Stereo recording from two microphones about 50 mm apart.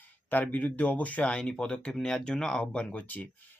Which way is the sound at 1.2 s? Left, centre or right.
Left.